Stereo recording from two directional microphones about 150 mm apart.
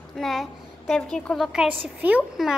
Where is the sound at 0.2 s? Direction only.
Centre (ahead or behind).